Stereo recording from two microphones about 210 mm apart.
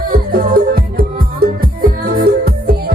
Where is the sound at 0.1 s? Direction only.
45° right (ahead or behind).